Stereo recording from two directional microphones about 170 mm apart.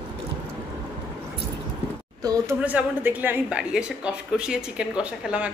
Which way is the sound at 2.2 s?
20° right (ahead or behind).